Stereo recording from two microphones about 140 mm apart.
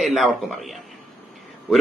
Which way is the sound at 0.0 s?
Centre (ahead or behind).